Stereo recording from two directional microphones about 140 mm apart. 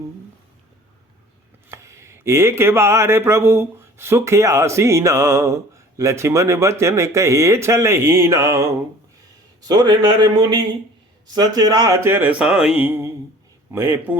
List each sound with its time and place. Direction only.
1.7 s a man's voice: 20° right (ahead or behind)